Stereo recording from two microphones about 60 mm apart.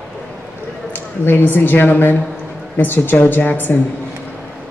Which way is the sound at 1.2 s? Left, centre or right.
Left.